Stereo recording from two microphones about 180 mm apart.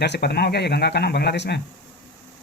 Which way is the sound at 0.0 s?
65° left (ahead or behind).